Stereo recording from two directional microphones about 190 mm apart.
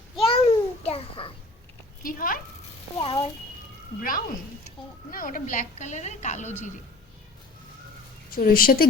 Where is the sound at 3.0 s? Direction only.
25° left (ahead or behind).